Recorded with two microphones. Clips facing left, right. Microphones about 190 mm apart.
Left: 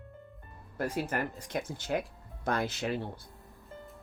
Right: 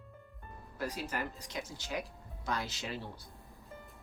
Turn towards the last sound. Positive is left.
turn(degrees=55)  # may be behind; listen again after turning